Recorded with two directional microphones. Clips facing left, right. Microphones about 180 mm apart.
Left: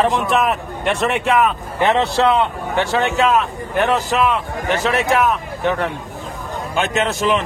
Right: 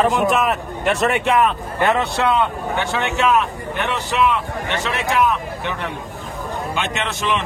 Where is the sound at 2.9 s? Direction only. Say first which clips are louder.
Left 2 dB; 35° left (ahead or behind).